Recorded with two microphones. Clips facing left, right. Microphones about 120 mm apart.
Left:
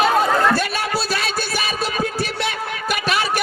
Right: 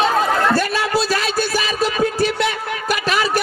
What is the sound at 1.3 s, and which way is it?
Music, 40° right (ahead or behind).